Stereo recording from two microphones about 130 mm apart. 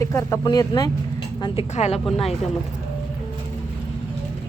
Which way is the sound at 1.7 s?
60° left (ahead or behind).